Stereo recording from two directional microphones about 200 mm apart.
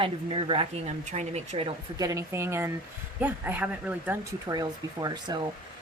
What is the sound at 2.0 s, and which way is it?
Speech, 15° right (ahead or behind).